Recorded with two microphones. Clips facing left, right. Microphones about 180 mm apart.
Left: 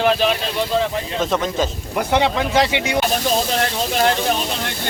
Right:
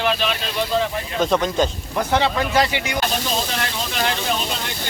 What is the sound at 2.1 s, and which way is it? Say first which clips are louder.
Speech: left 2 dB; 15° left (ahead or behind).